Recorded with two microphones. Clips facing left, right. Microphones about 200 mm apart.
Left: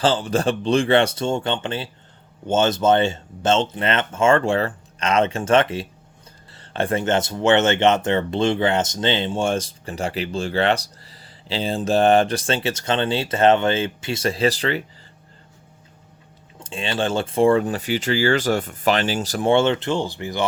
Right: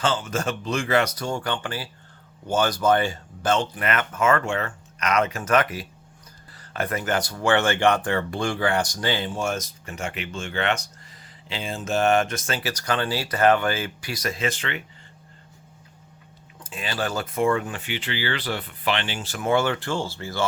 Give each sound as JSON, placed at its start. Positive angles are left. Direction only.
{"t": 0.0, "sound": "speech", "side_deg": 35}
{"t": 16.6, "sound": "speech", "side_deg": 25}